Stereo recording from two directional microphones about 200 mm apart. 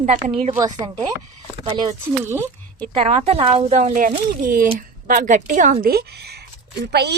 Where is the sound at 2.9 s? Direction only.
30° right (ahead or behind); by 7.1 s 55° right (ahead or behind).